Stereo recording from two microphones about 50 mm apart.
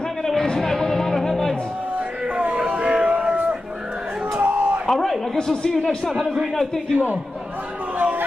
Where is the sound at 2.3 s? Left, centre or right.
Right.